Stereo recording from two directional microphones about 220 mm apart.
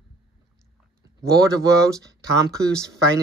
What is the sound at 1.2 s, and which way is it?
Speech, 15° right (ahead or behind).